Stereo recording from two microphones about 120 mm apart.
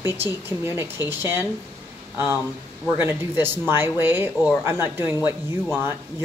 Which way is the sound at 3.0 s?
20° right (ahead or behind).